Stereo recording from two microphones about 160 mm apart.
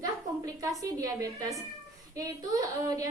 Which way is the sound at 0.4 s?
20° right (ahead or behind).